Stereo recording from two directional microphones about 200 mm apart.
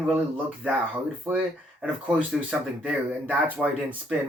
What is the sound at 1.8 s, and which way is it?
Speech, 5° right (ahead or behind).